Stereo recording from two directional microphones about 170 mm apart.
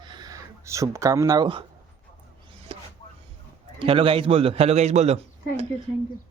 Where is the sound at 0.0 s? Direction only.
25° right (ahead or behind).